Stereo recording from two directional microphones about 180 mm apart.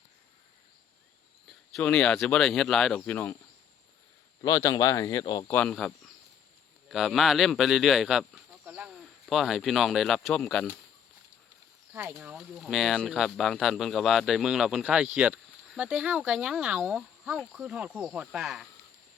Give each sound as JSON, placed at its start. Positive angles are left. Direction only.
{"t": 1.5, "sound": "speech", "side_deg": 0}
{"t": 4.4, "sound": "speech", "side_deg": 20}
{"t": 5.5, "sound": "speech", "side_deg": 5}
{"t": 11.9, "sound": "speech", "side_deg": -10}